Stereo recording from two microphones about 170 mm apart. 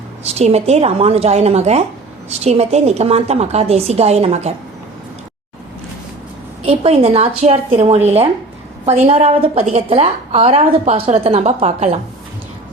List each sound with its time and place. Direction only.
0.3 s a woman's voice: 40° right (ahead or behind)
6.6 s a woman's voice: 35° right (ahead or behind)